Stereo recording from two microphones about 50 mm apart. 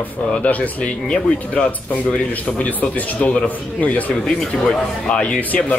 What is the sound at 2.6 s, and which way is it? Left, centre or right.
Speech, left.